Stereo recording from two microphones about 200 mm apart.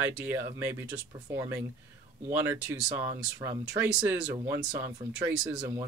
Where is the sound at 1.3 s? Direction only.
10° right (ahead or behind).